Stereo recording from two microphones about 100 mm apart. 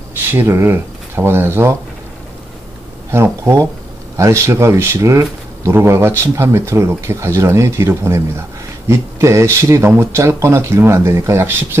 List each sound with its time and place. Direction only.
0.3 s speech: 25° right (ahead or behind)
3.1 s speech: 25° right (ahead or behind)